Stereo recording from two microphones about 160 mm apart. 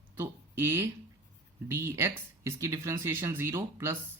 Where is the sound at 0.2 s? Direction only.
15° right (ahead or behind).